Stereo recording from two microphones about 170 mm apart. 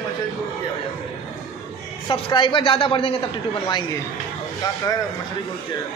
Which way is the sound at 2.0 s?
30° left (ahead or behind).